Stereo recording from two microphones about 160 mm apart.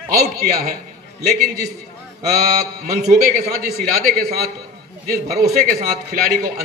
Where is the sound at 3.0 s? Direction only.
70° right (ahead or behind).